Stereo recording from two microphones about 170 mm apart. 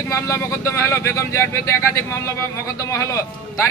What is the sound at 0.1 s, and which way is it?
Speech, 15° left (ahead or behind).